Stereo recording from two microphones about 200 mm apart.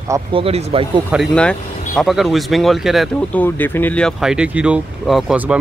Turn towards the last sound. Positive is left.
turn(degrees=-5)  # may be behind; listen again after turning